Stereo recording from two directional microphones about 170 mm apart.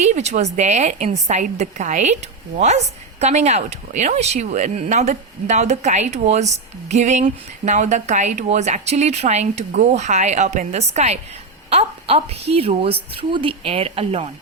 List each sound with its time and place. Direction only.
0.0 s a woman's voice: 40° right (ahead or behind)